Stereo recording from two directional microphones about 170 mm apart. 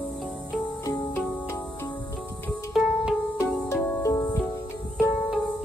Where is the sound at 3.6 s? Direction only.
15° left (ahead or behind).